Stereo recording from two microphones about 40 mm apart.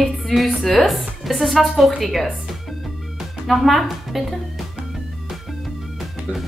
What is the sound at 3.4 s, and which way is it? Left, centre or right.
Speech, centre.